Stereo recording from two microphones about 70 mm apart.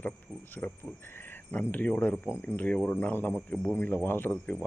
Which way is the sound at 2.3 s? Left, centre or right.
Left.